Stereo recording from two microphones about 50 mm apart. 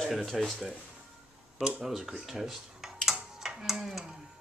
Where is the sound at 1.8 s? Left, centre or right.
Centre.